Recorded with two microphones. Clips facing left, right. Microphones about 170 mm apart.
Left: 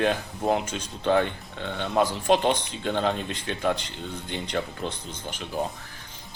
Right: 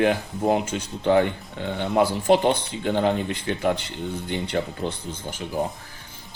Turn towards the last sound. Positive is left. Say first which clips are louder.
# right 3 dB
turn(degrees=-15)  # may be behind; listen again after turning